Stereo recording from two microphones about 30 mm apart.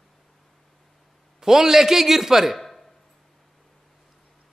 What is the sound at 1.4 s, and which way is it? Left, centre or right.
A man's voice, centre.